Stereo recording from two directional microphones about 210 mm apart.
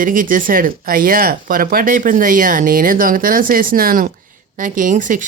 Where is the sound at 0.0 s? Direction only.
40° right (ahead or behind).